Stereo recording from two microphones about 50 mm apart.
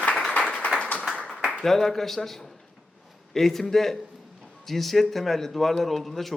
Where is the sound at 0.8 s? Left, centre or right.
Left.